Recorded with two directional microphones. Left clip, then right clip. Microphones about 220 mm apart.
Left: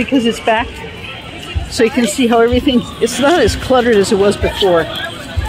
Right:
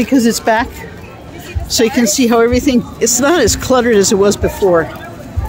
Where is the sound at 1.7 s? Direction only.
30° right (ahead or behind).